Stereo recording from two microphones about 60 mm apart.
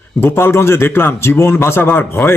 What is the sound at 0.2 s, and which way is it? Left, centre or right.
A man's voice, left.